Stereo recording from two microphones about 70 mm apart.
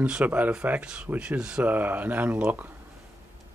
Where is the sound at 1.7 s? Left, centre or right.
Right.